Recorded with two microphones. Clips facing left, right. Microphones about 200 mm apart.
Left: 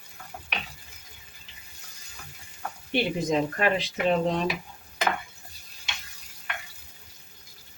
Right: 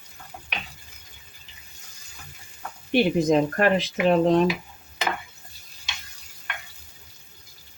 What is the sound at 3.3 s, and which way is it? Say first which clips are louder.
Speech: right 2 dB; 50° right (ahead or behind).